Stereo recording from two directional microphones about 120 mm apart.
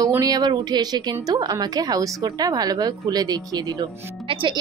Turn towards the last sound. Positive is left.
turn(degrees=-45)  # may be behind; listen again after turning